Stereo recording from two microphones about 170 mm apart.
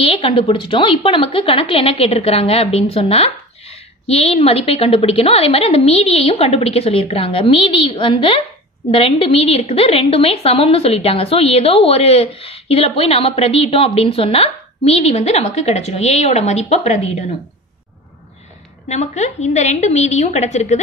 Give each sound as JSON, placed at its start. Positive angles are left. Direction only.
{"t": 0.0, "sound": "a woman's voice", "side_deg": 35}
{"t": 18.9, "sound": "a woman's voice", "side_deg": 40}